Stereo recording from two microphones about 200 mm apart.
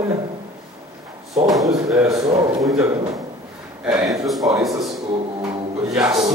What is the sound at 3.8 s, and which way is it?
Speech, 5° right (ahead or behind).